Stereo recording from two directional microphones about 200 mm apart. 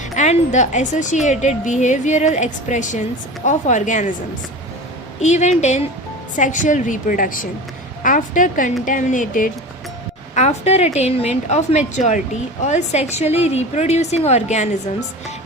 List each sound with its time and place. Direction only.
0.2 s a woman's voice: 35° left (ahead or behind)
5.2 s a woman's voice: 35° left (ahead or behind)